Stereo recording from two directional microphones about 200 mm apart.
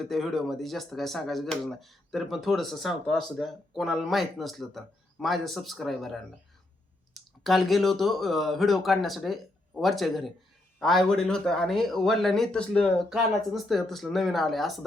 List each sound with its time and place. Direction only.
0.0 s speech: centre (ahead or behind)
7.4 s speech: centre (ahead or behind)